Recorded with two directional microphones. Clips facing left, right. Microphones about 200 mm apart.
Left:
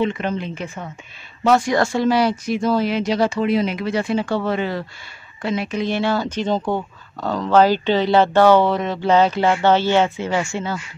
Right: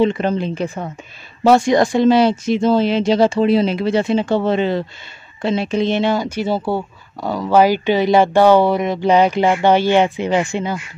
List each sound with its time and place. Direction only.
0.0 s a woman's voice: 35° right (ahead or behind); by 10.8 s 15° right (ahead or behind)